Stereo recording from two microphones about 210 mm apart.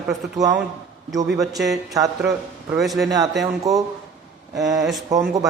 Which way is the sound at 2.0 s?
15° right (ahead or behind).